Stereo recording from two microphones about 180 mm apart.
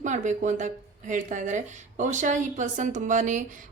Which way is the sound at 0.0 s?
45° right (ahead or behind).